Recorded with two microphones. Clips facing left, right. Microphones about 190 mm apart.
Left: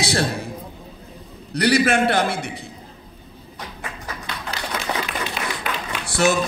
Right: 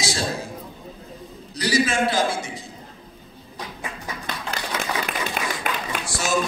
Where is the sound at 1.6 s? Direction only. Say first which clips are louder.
Left 4 dB; 60° left (ahead or behind).